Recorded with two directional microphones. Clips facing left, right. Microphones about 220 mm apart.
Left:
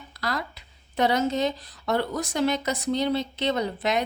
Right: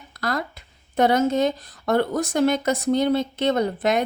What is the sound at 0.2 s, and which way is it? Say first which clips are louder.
A woman's voice: right 4 dB; 50° right (ahead or behind).